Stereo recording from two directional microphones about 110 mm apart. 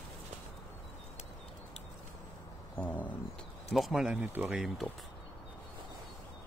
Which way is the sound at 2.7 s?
15° left (ahead or behind).